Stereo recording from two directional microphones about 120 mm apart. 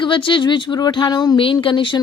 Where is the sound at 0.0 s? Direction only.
45° left (ahead or behind).